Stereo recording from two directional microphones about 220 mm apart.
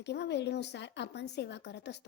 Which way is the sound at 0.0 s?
50° left (ahead or behind).